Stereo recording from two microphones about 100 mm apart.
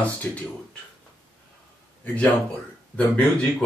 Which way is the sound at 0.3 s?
20° left (ahead or behind).